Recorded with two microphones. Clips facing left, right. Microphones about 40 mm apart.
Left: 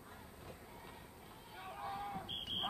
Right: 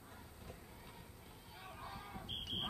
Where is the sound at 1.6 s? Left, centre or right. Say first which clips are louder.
Left 7 dB; centre.